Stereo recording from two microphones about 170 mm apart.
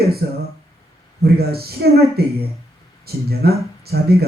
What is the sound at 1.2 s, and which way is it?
Speech, 65° right (ahead or behind).